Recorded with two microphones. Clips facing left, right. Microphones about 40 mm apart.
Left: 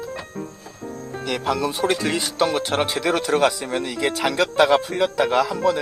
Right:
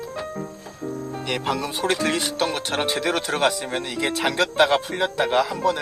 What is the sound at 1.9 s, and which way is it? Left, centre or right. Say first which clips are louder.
Speech: even; right.